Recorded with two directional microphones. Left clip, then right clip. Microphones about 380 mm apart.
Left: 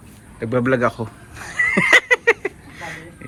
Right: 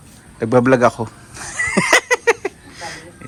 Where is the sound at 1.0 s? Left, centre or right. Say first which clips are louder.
Right 3 dB; centre.